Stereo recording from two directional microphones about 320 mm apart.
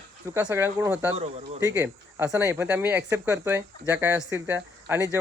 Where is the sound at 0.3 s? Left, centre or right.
Centre.